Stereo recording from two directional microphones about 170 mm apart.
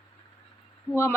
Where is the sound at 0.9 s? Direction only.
15° left (ahead or behind).